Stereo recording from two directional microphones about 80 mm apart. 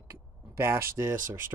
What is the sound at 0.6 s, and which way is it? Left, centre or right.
Speech, right.